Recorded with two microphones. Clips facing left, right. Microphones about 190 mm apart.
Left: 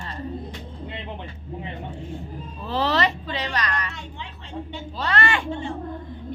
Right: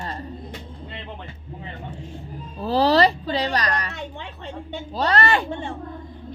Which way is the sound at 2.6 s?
35° right (ahead or behind).